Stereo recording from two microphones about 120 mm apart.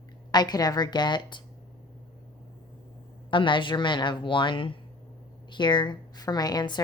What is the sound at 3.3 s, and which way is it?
A woman's voice, 45° left (ahead or behind).